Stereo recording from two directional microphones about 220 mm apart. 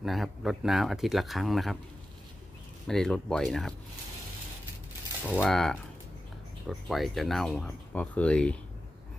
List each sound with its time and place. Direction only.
0.0 s speech: centre (ahead or behind)
2.9 s speech: centre (ahead or behind)
5.2 s speech: 5° left (ahead or behind)